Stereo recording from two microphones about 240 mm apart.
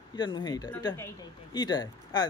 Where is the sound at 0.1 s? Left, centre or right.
Centre.